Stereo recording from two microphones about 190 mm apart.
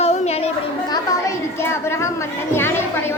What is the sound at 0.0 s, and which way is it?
Children playing, 35° left (ahead or behind).